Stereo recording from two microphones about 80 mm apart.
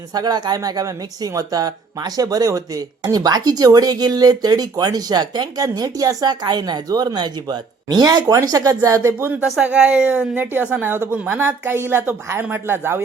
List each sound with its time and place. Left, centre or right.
0.1 s speech: right
5.6 s speech: right
9.3 s speech: centre
10.3 s speech: right